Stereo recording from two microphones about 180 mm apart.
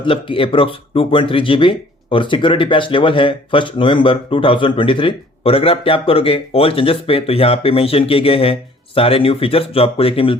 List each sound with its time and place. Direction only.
0.0 s speech: 30° left (ahead or behind)